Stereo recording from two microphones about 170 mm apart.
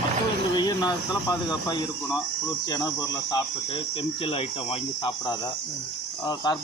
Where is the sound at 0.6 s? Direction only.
25° left (ahead or behind).